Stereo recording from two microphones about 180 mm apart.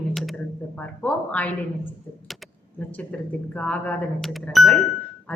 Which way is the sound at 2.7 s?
10° left (ahead or behind).